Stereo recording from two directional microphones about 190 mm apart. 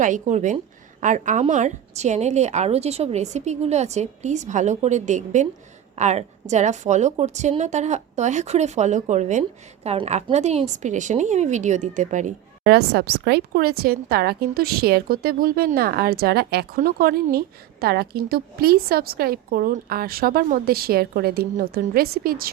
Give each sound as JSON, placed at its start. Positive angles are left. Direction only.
{"t": 0.0, "sound": "a woman's voice", "side_deg": -40}